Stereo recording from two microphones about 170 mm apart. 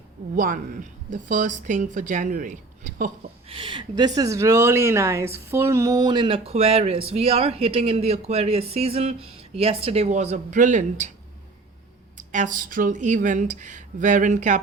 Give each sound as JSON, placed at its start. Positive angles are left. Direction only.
{"t": 0.3, "sound": "a woman's voice", "side_deg": -50}
{"t": 3.5, "sound": "speech", "side_deg": -30}
{"t": 12.1, "sound": "a woman's voice", "side_deg": -50}